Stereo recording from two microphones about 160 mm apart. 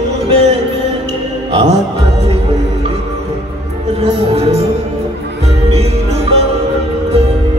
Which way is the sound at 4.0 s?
40° right (ahead or behind).